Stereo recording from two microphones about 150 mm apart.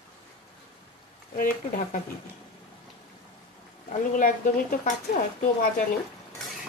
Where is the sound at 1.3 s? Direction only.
65° left (ahead or behind).